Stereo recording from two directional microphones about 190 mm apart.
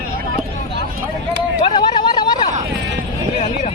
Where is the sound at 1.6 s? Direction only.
25° left (ahead or behind).